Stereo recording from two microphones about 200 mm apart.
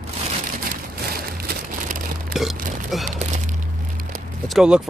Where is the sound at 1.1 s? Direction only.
50° right (ahead or behind).